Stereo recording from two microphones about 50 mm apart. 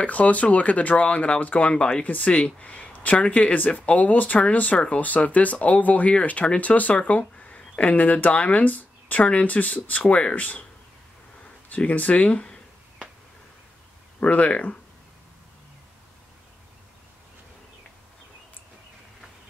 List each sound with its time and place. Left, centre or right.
0.0 s speech: left
14.2 s speech: left